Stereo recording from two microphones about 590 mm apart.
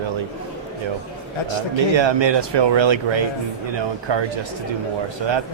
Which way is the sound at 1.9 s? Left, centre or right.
Right.